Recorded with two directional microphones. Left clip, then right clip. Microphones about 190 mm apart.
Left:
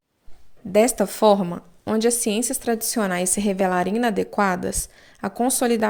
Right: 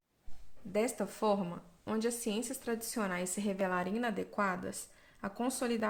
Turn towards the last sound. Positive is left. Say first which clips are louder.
# left 14 dB
turn(degrees=35)  # may be behind; listen again after turning